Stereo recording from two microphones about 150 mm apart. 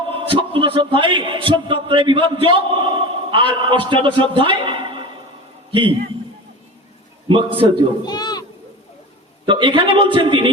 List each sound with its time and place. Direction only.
0.3 s a man's voice: 35° right (ahead or behind)
7.3 s a man's voice: 35° right (ahead or behind)
8.0 s children playing: 25° left (ahead or behind)
9.5 s a man's voice: 35° right (ahead or behind)